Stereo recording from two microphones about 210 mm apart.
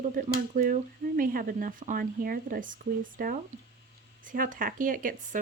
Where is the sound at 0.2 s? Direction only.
40° right (ahead or behind).